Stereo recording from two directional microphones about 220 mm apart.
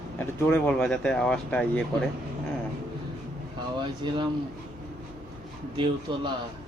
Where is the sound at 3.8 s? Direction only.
20° right (ahead or behind).